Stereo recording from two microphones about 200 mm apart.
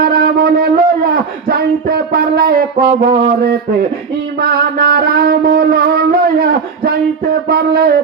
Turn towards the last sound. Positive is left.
turn(degrees=-50)  # may be behind; listen again after turning